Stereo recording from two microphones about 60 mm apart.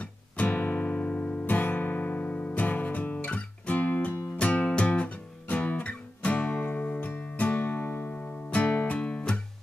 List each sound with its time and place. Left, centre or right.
0.0 s guitar: left
4.4 s music: left